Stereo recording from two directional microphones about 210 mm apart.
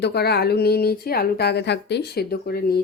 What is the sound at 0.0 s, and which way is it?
Speech, 50° left (ahead or behind).